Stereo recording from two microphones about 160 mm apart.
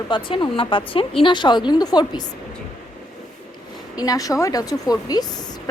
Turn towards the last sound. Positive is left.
turn(degrees=25)  # may be behind; listen again after turning